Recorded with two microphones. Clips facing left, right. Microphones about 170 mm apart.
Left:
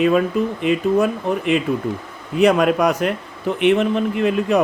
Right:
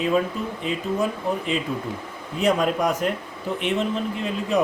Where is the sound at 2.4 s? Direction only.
70° left (ahead or behind).